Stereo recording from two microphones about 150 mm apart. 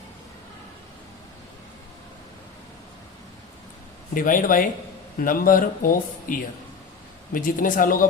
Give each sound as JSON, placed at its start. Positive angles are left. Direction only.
{"t": 4.1, "sound": "speech", "side_deg": 65}